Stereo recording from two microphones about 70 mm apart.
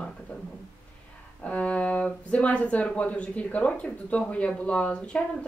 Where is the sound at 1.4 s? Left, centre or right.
Centre.